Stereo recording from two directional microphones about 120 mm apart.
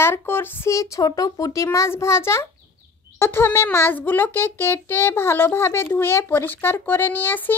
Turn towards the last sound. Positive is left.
turn(degrees=15)  # may be behind; listen again after turning